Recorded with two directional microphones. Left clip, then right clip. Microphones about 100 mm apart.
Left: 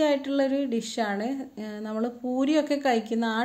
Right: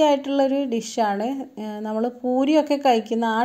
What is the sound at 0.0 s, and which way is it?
A woman's voice, 35° right (ahead or behind).